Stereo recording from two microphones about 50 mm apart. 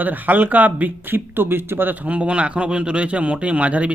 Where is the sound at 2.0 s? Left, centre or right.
Right.